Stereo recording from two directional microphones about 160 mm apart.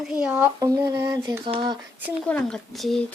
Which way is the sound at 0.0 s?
5° right (ahead or behind).